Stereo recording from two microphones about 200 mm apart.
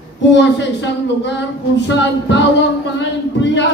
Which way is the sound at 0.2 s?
60° left (ahead or behind).